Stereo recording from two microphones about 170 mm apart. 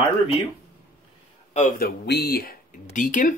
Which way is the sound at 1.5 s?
50° left (ahead or behind).